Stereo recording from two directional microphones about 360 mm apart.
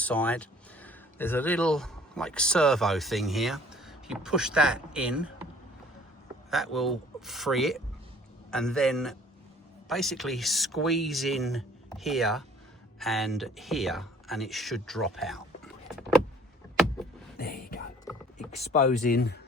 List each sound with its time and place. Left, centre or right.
0.0 s speech: centre
6.7 s speech: centre
17.3 s whispering: left
18.0 s mechanisms: centre